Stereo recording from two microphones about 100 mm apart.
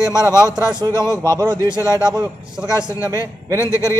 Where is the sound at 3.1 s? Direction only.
35° right (ahead or behind).